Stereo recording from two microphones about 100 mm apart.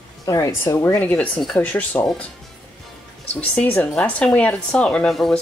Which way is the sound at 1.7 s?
15° left (ahead or behind).